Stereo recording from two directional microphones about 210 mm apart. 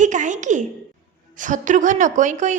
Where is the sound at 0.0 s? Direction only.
35° right (ahead or behind).